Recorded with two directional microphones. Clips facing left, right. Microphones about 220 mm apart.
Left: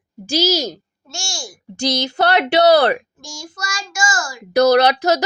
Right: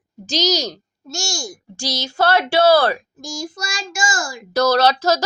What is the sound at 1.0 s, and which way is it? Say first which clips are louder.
Speech: right 5 dB; 40° right (ahead or behind).